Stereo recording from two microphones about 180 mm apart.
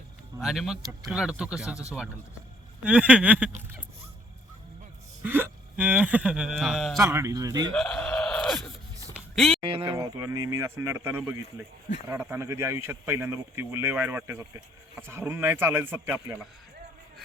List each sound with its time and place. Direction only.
0.3 s speech: centre (ahead or behind)
0.8 s speech: 20° right (ahead or behind)
1.1 s speech: 5° right (ahead or behind)
2.8 s speech: 5° right (ahead or behind)
5.2 s speech: 10° right (ahead or behind)
7.0 s speech: 15° right (ahead or behind)
7.7 s groan: 5° left (ahead or behind)
9.1 s a sound: centre (ahead or behind)
9.6 s speech: 30° right (ahead or behind)
10.0 s speech: 20° right (ahead or behind)